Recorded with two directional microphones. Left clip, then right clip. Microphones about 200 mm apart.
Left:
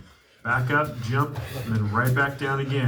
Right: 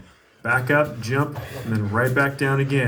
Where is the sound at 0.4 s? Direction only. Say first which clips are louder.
Right 4 dB; 55° right (ahead or behind).